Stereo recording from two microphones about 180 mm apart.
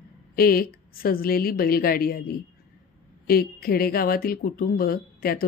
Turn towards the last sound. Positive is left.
turn(degrees=55)  # may be behind; listen again after turning